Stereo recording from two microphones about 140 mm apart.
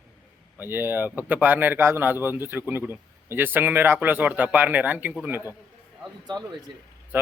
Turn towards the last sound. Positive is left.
turn(degrees=-15)  # may be behind; listen again after turning